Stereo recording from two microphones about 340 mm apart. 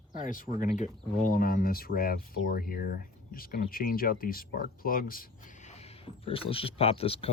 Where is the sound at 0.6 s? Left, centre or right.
Left.